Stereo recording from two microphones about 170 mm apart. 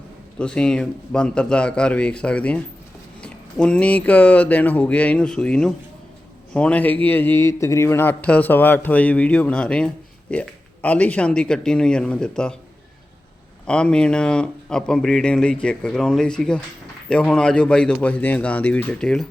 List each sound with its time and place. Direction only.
0.3 s a man's voice: 5° left (ahead or behind)
13.7 s speech: 5° left (ahead or behind)